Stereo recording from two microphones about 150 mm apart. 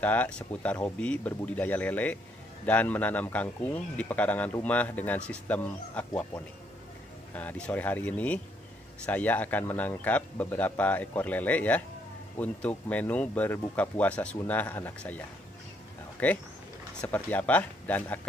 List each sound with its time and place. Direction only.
0.0 s a man's voice: 10° left (ahead or behind)
7.3 s a man's voice: 10° left (ahead or behind)